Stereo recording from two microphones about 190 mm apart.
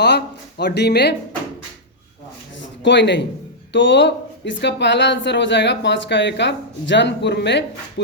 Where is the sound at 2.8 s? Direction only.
65° left (ahead or behind).